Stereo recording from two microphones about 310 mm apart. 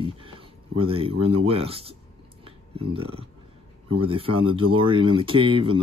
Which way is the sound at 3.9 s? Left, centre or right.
Centre.